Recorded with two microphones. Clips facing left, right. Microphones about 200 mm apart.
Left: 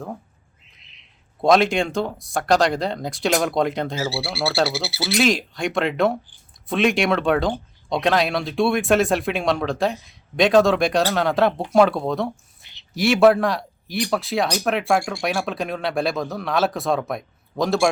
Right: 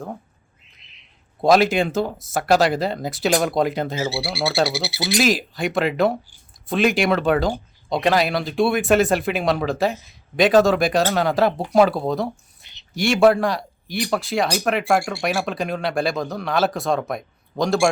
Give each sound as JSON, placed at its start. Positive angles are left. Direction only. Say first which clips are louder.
{"t": 1.4, "sound": "speech", "louder": "right 1 dB", "side_deg": -5}
{"t": 4.7, "sound": "speech", "louder": "right 1 dB", "side_deg": -15}
{"t": 5.1, "sound": "speech", "louder": "even", "side_deg": -5}